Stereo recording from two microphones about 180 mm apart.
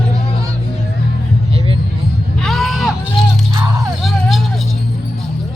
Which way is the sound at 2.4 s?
Centre (ahead or behind).